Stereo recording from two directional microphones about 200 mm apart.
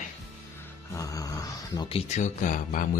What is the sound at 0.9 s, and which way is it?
Grunt, 15° left (ahead or behind).